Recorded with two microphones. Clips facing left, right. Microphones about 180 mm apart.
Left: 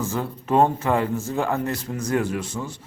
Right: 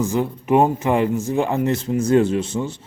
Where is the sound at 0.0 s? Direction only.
15° right (ahead or behind).